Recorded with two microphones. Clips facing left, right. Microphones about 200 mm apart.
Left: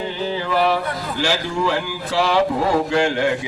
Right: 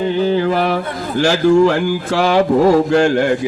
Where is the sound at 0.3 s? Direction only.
50° right (ahead or behind).